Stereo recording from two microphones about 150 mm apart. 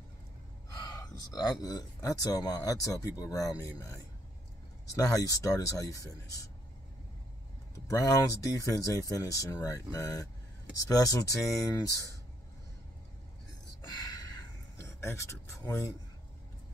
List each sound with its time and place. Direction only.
1.0 s speech: 25° left (ahead or behind)
7.9 s speech: 25° left (ahead or behind)
13.8 s gasp: 25° left (ahead or behind)
14.8 s speech: 20° left (ahead or behind)